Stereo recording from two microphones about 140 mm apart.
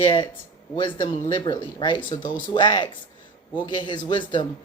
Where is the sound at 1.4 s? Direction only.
35° left (ahead or behind).